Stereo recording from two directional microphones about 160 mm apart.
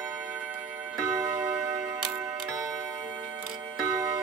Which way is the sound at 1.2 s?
20° right (ahead or behind).